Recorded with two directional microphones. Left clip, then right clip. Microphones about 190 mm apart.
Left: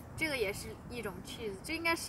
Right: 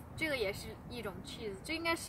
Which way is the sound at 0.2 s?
10° right (ahead or behind).